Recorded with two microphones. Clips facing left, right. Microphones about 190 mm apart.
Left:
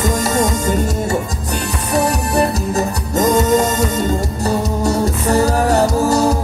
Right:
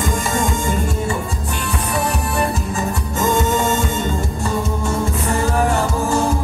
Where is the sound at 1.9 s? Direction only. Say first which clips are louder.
Left 7 dB; 40° left (ahead or behind).